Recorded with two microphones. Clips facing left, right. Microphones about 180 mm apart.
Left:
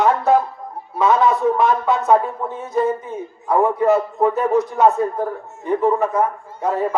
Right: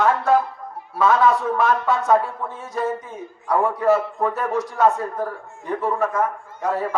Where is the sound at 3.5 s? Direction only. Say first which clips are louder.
Left 3 dB; 20° left (ahead or behind).